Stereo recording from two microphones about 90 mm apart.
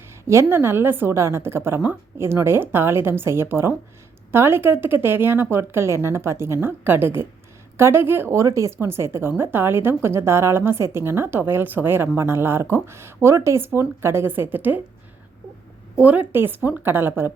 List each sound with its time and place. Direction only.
0.3 s a woman's voice: 30° right (ahead or behind)
16.0 s a woman's voice: 15° right (ahead or behind)